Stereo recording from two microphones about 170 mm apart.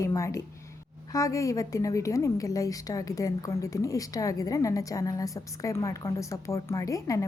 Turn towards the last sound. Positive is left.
turn(degrees=20)  # may be behind; listen again after turning